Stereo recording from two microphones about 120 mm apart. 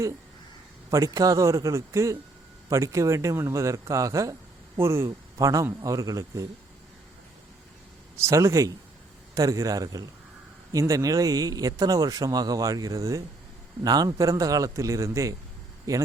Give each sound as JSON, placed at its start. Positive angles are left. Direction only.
{"t": 0.9, "sound": "a man's voice", "side_deg": -30}
{"t": 8.1, "sound": "a man's voice", "side_deg": -25}